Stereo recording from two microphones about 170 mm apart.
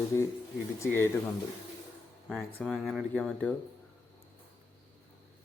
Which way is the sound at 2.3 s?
5° left (ahead or behind).